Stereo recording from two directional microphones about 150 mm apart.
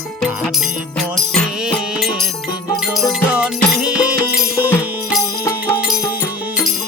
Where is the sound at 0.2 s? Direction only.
Centre (ahead or behind).